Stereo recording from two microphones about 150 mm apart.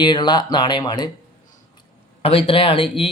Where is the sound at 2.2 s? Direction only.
40° left (ahead or behind).